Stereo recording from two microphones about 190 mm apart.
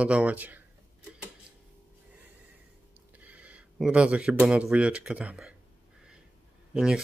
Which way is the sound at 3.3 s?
5° right (ahead or behind).